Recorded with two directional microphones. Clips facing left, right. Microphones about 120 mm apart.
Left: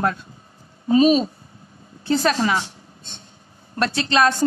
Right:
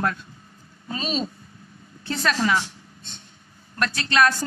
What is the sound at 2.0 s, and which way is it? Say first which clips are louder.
A woman's voice: left 5 dB; 30° left (ahead or behind).